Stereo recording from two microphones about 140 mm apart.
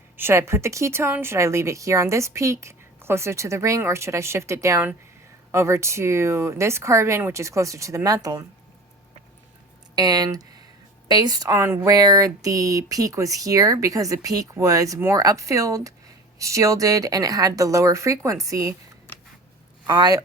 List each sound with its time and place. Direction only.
0.2 s speech: 20° right (ahead or behind)
9.9 s speech: 30° right (ahead or behind)
19.9 s speech: 25° right (ahead or behind)